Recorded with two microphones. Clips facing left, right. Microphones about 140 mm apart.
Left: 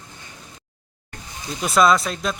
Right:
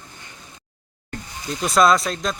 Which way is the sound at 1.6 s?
Centre (ahead or behind).